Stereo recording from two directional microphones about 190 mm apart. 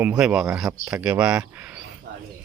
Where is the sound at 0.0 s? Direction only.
5° right (ahead or behind).